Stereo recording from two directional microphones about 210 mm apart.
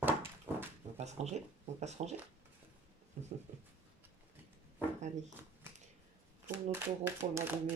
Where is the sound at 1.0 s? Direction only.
30° right (ahead or behind).